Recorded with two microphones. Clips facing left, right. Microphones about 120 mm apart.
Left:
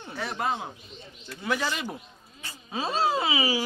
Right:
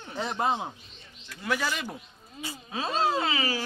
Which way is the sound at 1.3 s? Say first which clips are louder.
Left 1 dB; centre (ahead or behind).